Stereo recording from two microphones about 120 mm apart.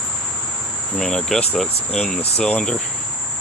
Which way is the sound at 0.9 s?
5° left (ahead or behind).